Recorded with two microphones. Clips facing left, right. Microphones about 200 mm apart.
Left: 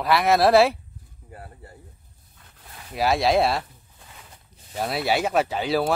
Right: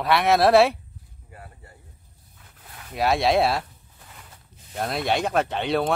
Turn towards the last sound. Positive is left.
turn(degrees=5)  # may be behind; listen again after turning